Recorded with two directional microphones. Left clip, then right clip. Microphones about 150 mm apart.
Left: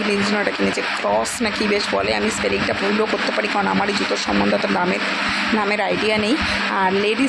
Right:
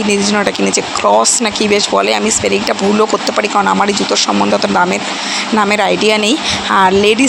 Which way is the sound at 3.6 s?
20° right (ahead or behind).